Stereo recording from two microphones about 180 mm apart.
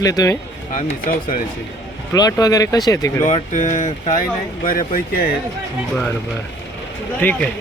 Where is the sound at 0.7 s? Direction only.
50° left (ahead or behind).